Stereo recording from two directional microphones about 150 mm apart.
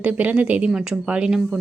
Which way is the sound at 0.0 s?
10° right (ahead or behind).